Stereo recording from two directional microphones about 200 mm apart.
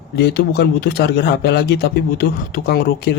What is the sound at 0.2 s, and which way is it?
Speech, 55° left (ahead or behind).